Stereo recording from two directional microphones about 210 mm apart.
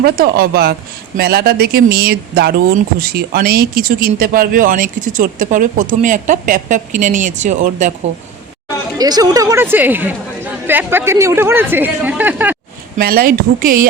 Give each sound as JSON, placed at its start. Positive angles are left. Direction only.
{"t": 0.0, "sound": "speech", "side_deg": -45}
{"t": 9.0, "sound": "speech", "side_deg": -20}
{"t": 13.0, "sound": "speech", "side_deg": -45}